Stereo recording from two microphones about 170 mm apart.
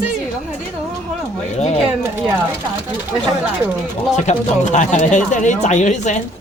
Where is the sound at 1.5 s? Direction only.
40° left (ahead or behind).